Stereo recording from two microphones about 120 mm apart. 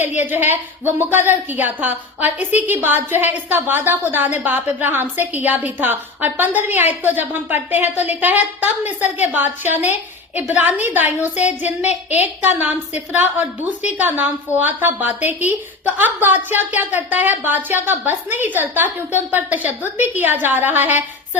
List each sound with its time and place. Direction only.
0.2 s a woman's voice: 15° right (ahead or behind)